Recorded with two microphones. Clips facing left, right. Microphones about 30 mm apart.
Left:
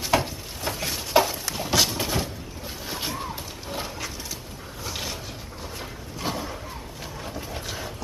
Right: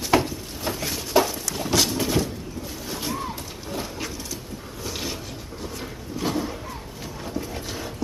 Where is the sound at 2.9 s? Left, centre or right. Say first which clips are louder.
Right 1 dB; centre.